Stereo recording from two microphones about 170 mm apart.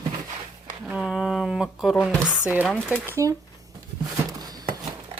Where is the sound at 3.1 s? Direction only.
20° right (ahead or behind).